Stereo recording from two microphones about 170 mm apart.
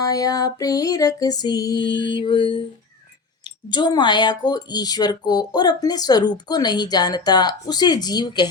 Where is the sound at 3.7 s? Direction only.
25° left (ahead or behind).